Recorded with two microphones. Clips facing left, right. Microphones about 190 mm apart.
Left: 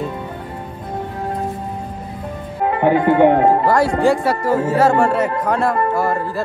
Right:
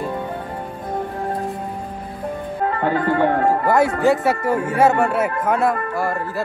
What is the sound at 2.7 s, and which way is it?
Speech, 20° left (ahead or behind).